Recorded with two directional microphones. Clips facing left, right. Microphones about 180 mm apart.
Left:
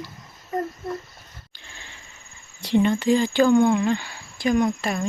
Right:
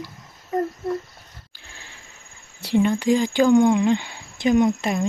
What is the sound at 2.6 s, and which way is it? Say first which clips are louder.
Speech: even; 10° right (ahead or behind).